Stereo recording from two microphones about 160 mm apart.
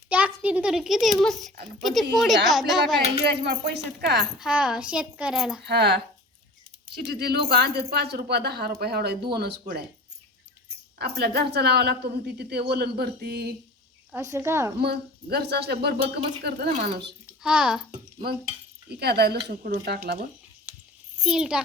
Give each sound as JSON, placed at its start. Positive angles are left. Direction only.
{"t": 0.1, "sound": "a child's voice", "side_deg": -10}
{"t": 3.2, "sound": "speech", "side_deg": -90}
{"t": 4.4, "sound": "a child's voice", "side_deg": -5}
{"t": 5.6, "sound": "speech", "side_deg": -90}
{"t": 6.9, "sound": "speech", "side_deg": -90}
{"t": 10.9, "sound": "speech", "side_deg": -90}
{"t": 14.1, "sound": "speech", "side_deg": -20}
{"t": 14.8, "sound": "speech", "side_deg": -90}
{"t": 17.4, "sound": "a child's voice", "side_deg": -5}
{"t": 18.9, "sound": "speech", "side_deg": -90}
{"t": 20.7, "sound": "a sound", "side_deg": -10}
{"t": 21.2, "sound": "a child's voice", "side_deg": -5}